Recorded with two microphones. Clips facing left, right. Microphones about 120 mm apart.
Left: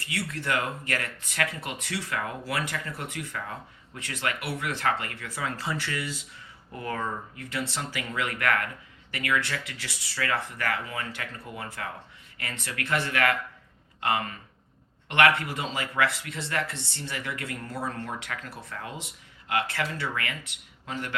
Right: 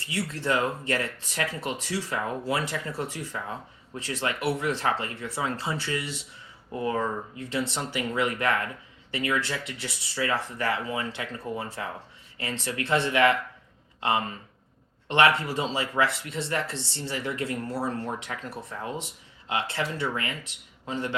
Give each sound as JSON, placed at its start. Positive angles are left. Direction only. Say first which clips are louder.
{"t": 0.0, "sound": "speech", "louder": "right 3 dB", "side_deg": -25}